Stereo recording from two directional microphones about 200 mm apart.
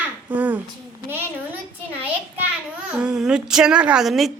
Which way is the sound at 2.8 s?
5° right (ahead or behind).